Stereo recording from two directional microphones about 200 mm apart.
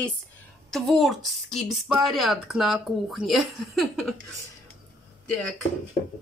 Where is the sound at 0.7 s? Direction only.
Centre (ahead or behind).